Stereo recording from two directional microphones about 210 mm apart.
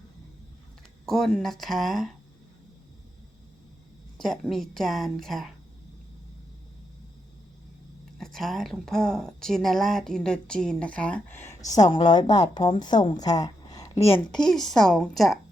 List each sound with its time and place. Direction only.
1.0 s a woman's voice: centre (ahead or behind)
4.2 s a woman's voice: centre (ahead or behind)
8.2 s a woman's voice: centre (ahead or behind)
11.9 s a woman's voice: 20° left (ahead or behind)
13.9 s a woman's voice: 30° left (ahead or behind)
14.3 s a woman's voice: 5° left (ahead or behind)